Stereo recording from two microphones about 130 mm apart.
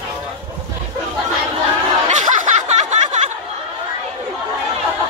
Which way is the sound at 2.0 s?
70° right (ahead or behind).